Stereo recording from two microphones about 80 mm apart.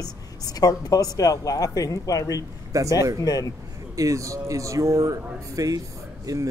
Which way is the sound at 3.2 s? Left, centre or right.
Left.